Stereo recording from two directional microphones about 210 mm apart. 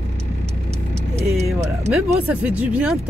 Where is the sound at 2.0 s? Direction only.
10° right (ahead or behind).